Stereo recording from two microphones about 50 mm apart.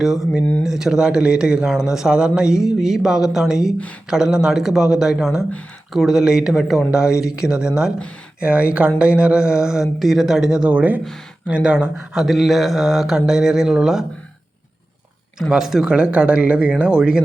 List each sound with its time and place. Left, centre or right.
0.0 s a man's voice: centre
8.4 s a man's voice: right
11.4 s speech: right
12.2 s speech: centre
15.4 s a man's voice: centre